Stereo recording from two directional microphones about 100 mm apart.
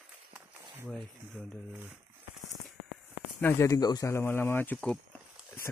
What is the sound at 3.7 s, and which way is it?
Speech, 40° left (ahead or behind).